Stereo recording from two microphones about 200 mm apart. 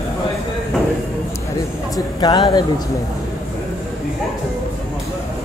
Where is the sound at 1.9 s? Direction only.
20° left (ahead or behind).